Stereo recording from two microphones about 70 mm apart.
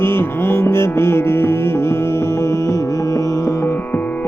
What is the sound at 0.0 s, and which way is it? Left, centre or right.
Music, left.